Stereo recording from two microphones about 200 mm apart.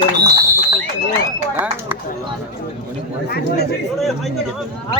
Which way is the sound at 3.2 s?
50° left (ahead or behind).